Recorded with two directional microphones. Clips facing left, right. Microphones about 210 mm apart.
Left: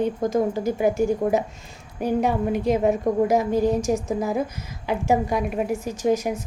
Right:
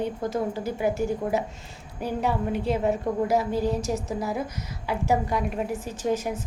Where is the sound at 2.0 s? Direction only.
15° left (ahead or behind).